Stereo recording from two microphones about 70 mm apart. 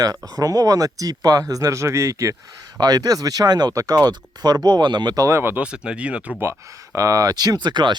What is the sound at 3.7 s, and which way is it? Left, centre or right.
Speech, right.